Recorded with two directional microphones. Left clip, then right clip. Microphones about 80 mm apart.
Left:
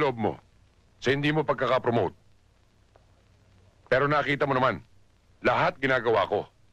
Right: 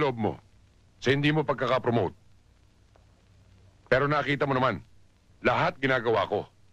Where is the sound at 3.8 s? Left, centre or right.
Right.